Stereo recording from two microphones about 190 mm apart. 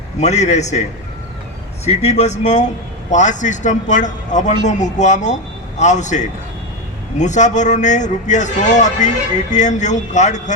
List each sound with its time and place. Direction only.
0.2 s a man's voice: 35° left (ahead or behind)
1.8 s a man's voice: 35° left (ahead or behind)